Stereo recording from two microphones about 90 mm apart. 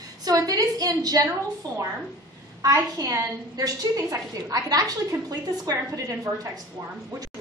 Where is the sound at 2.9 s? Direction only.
40° right (ahead or behind).